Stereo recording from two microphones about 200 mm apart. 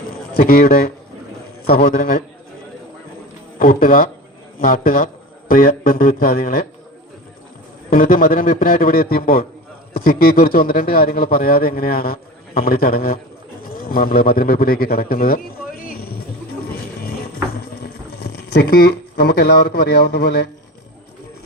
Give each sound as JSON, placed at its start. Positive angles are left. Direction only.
{"t": 0.1, "sound": "a sound", "side_deg": 50}
{"t": 1.6, "sound": "a man's voice", "side_deg": 50}
{"t": 3.6, "sound": "a man's voice", "side_deg": 45}
{"t": 7.9, "sound": "a man's voice", "side_deg": 45}
{"t": 15.9, "sound": "vehicle", "side_deg": 50}
{"t": 17.8, "sound": "a sound", "side_deg": 55}
{"t": 19.1, "sound": "a man's voice", "side_deg": 55}